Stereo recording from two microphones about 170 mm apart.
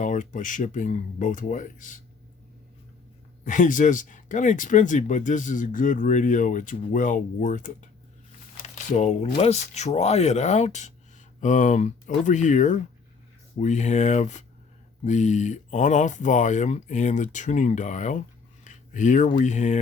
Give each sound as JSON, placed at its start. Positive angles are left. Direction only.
{"t": 0.0, "sound": "speech", "side_deg": 50}
{"t": 3.4, "sound": "speech", "side_deg": 50}